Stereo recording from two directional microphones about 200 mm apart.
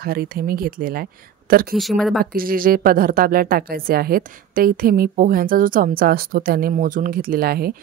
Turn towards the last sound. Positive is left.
turn(degrees=-50)  # may be behind; listen again after turning